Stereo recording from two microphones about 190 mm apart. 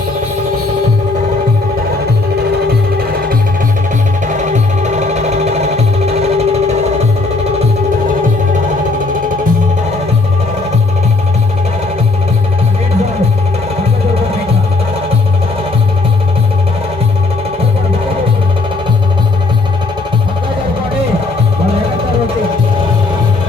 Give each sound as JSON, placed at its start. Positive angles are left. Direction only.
{"t": 4.3, "sound": "music", "side_deg": -40}